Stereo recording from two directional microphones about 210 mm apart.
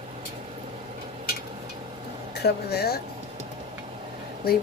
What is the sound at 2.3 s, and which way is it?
Speech, 50° left (ahead or behind).